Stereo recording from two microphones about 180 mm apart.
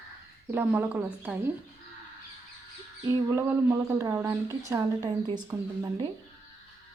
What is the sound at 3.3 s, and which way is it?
A woman's voice, 15° right (ahead or behind).